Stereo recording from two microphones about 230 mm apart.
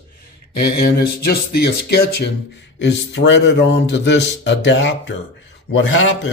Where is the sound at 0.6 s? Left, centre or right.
Left.